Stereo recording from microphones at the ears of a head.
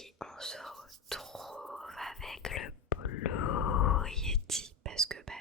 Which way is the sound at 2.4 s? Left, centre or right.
Left.